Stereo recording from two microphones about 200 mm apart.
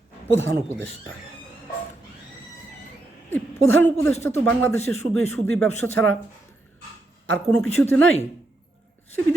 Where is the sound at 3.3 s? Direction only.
10° left (ahead or behind).